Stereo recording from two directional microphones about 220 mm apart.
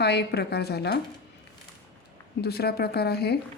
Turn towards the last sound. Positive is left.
turn(degrees=45)  # may be behind; listen again after turning